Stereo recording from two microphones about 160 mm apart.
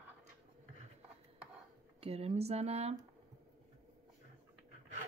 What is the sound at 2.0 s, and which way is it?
Speech, 40° right (ahead or behind).